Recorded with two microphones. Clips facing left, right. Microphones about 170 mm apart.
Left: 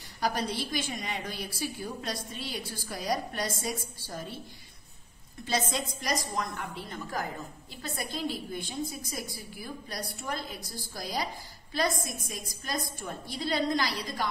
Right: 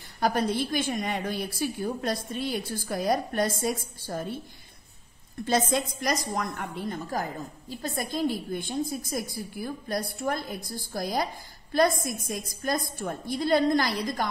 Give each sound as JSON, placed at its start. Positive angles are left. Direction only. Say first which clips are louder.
{"t": 0.2, "sound": "a woman's voice", "louder": "right 5 dB", "side_deg": -50}
{"t": 5.4, "sound": "a woman's voice", "louder": "right 6 dB", "side_deg": -50}